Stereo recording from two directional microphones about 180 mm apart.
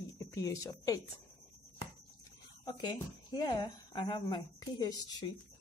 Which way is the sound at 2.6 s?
25° left (ahead or behind).